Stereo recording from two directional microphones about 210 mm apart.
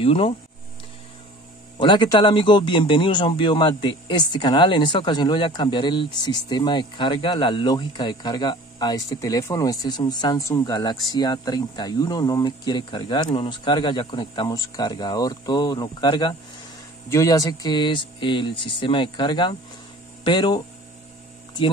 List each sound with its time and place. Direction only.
0.0 s speech: 25° left (ahead or behind)
1.8 s speech: 25° left (ahead or behind)